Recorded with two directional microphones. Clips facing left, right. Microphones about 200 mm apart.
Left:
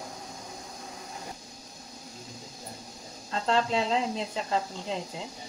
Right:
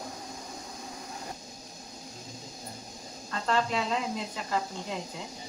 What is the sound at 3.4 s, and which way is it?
Speech, 25° left (ahead or behind).